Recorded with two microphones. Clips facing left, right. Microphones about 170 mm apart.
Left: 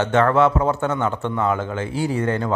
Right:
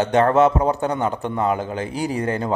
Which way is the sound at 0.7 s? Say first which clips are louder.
Even; 35° right (ahead or behind).